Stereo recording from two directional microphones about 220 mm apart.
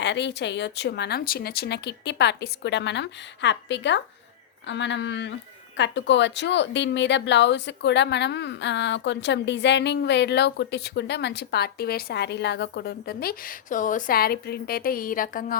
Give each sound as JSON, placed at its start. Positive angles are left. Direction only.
{"t": 0.0, "sound": "a woman's voice", "side_deg": 50}